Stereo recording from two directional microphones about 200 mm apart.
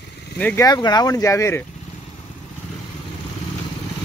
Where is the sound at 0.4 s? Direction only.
5° left (ahead or behind).